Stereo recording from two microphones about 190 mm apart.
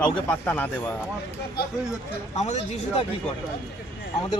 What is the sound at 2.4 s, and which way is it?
Speech, 35° left (ahead or behind).